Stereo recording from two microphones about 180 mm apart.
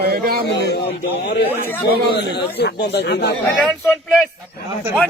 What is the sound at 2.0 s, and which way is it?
A man's voice, 70° left (ahead or behind).